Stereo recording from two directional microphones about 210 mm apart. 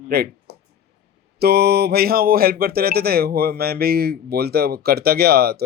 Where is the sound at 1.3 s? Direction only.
50° right (ahead or behind).